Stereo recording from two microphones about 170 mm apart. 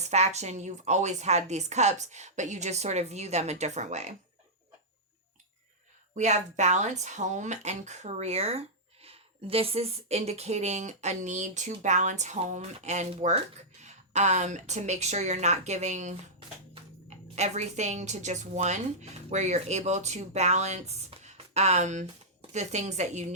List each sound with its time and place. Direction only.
0.0 s speech: 40° right (ahead or behind)
6.1 s speech: 45° right (ahead or behind)
17.3 s speech: 40° right (ahead or behind)